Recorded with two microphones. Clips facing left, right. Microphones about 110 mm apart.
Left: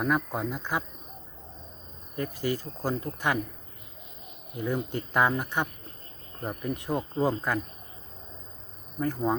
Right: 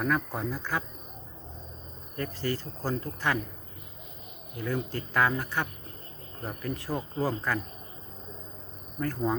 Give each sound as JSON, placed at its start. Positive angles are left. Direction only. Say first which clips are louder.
{"t": 0.0, "sound": "speech", "louder": "left 1 dB", "side_deg": 15}
{"t": 2.1, "sound": "speech", "louder": "left 2 dB", "side_deg": 15}
{"t": 4.5, "sound": "speech", "louder": "left 2 dB", "side_deg": 20}
{"t": 9.0, "sound": "speech", "louder": "left 2 dB", "side_deg": 15}